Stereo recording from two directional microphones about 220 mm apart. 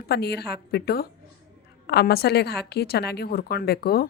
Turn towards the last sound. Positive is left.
turn(degrees=45)  # may be behind; listen again after turning